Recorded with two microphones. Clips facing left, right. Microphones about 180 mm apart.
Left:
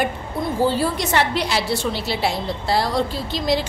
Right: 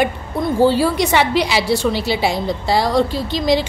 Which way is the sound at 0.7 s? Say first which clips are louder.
Right 5 dB; centre (ahead or behind).